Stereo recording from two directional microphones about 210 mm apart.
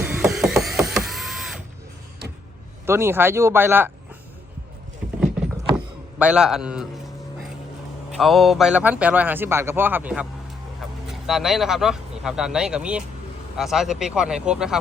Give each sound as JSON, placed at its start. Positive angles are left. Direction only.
{"t": 0.0, "sound": "mechanisms", "side_deg": -10}
{"t": 0.3, "sound": "mechanisms", "side_deg": 0}
{"t": 2.8, "sound": "a man's voice", "side_deg": -10}
{"t": 6.1, "sound": "speech", "side_deg": -5}
{"t": 8.1, "sound": "a man's voice", "side_deg": 0}